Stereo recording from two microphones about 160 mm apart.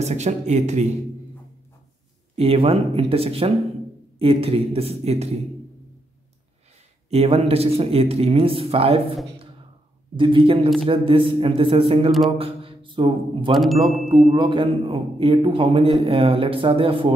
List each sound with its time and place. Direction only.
0.0 s speech: 45° right (ahead or behind)
2.3 s speech: 35° right (ahead or behind)
7.1 s speech: 40° right (ahead or behind)
10.1 s speech: 30° right (ahead or behind)
12.4 s a sound: 35° right (ahead or behind)
13.6 s speech: centre (ahead or behind)
14.3 s speech: 30° right (ahead or behind)